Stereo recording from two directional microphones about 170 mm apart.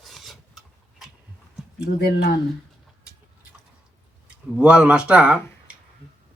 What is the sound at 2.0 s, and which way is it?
Speech, 70° left (ahead or behind).